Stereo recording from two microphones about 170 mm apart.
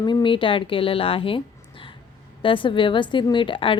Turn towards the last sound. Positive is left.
turn(degrees=30)  # may be behind; listen again after turning